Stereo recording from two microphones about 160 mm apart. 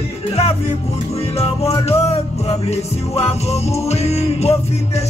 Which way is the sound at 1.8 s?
40° left (ahead or behind).